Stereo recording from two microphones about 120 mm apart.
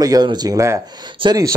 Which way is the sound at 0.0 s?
35° right (ahead or behind).